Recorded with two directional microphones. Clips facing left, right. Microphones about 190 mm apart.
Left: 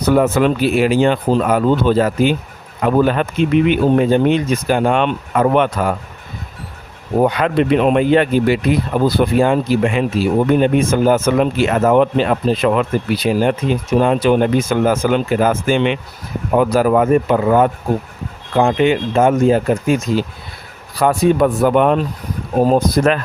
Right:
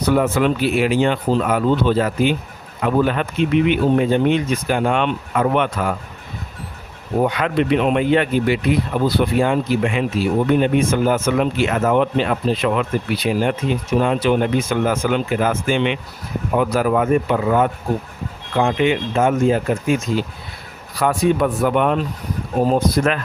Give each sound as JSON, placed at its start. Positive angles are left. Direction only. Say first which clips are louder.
{"t": 0.0, "sound": "speech", "louder": "left 3 dB", "side_deg": 40}
{"t": 7.2, "sound": "speech", "louder": "left 4 dB", "side_deg": 35}